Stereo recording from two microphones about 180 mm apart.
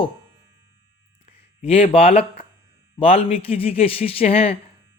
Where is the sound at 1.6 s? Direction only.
35° left (ahead or behind).